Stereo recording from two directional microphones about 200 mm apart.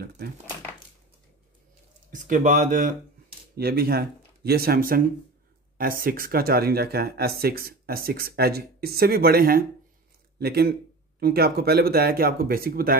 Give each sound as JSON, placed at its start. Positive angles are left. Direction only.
{"t": 2.1, "sound": "speech", "side_deg": -40}